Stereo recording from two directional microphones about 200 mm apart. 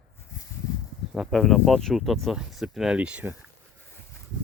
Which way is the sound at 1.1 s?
Centre (ahead or behind).